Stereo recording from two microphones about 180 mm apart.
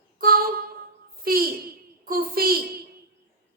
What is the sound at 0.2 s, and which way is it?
Female singing, 55° right (ahead or behind).